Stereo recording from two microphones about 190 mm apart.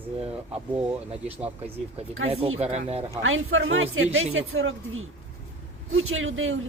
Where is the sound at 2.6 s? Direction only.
35° right (ahead or behind).